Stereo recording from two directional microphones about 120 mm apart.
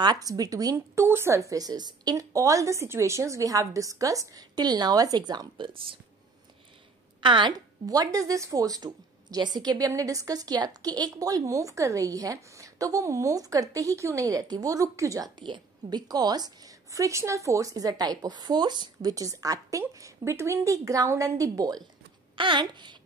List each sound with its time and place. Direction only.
0.0 s speech: 35° right (ahead or behind)
7.2 s speech: 40° right (ahead or behind)
22.3 s speech: 45° right (ahead or behind)